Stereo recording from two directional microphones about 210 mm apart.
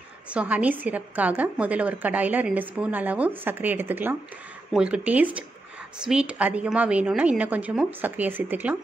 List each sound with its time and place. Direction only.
0.3 s a woman's voice: 5° right (ahead or behind)